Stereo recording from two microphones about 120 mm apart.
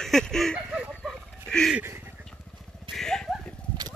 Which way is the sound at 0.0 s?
5° left (ahead or behind).